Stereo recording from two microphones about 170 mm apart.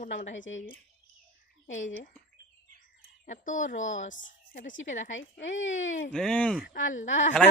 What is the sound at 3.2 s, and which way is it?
A woman's voice, 50° left (ahead or behind).